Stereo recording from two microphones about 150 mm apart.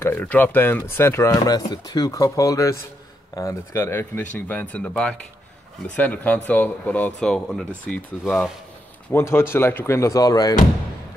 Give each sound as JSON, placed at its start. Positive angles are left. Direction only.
{"t": 0.0, "sound": "speech", "side_deg": 10}
{"t": 9.1, "sound": "speech", "side_deg": 15}